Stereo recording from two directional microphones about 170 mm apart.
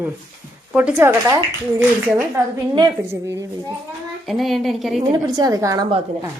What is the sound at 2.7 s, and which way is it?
Speech, 20° right (ahead or behind).